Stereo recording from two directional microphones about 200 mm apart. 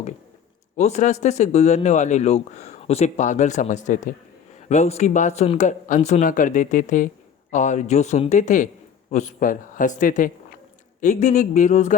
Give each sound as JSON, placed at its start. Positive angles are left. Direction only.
{"t": 0.8, "sound": "speech", "side_deg": 35}